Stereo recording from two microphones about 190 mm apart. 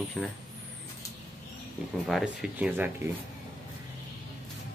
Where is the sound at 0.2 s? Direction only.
Centre (ahead or behind).